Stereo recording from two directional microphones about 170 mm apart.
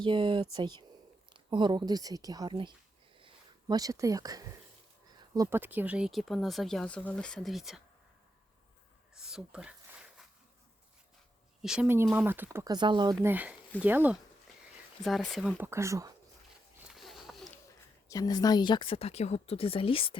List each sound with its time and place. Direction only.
0.0 s speech: 30° right (ahead or behind)
3.2 s a sound: 30° right (ahead or behind)
5.3 s speech: 15° right (ahead or behind); by 7.8 s centre (ahead or behind)
9.1 s a sound: 5° right (ahead or behind)
11.6 s speech: 5° right (ahead or behind); by 13.1 s 25° right (ahead or behind)
13.2 s speech: 10° right (ahead or behind)
15.0 s speech: centre (ahead or behind)
15.6 s speech: 15° right (ahead or behind)
16.9 s a sound: centre (ahead or behind)
18.1 s speech: 20° left (ahead or behind)